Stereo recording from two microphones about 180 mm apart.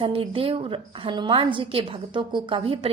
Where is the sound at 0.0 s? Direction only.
30° right (ahead or behind).